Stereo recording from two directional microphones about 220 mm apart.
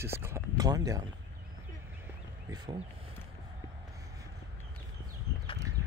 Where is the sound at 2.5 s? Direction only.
20° right (ahead or behind).